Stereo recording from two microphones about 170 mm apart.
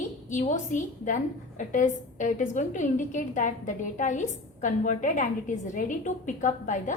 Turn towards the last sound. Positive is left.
turn(degrees=50)  # may be behind; listen again after turning